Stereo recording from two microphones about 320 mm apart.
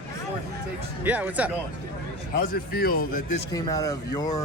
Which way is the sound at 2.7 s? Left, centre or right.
Left.